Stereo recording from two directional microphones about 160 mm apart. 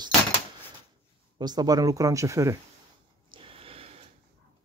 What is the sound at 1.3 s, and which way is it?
Speech, 25° right (ahead or behind).